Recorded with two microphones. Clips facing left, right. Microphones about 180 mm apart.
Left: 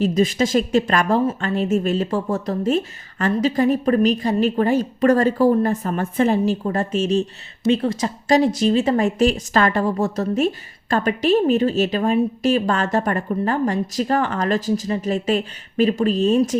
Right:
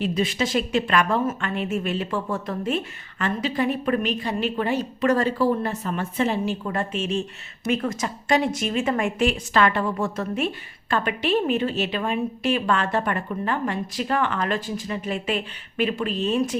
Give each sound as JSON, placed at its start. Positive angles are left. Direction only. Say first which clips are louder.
{"t": 0.0, "sound": "speech", "louder": "left 6 dB", "side_deg": 45}